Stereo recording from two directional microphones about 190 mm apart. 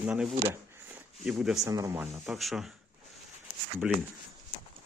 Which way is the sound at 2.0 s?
Centre (ahead or behind).